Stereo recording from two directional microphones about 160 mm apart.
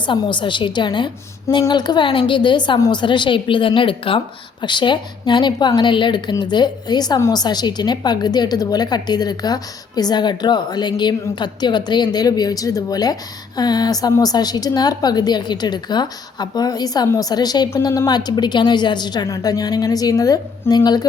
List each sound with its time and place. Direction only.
0.0 s a woman's voice: 30° left (ahead or behind)